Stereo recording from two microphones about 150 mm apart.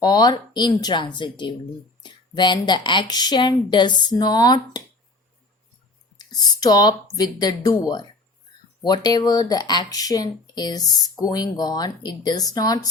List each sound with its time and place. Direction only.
0.0 s speech: 25° left (ahead or behind)
6.1 s speech: 25° left (ahead or behind)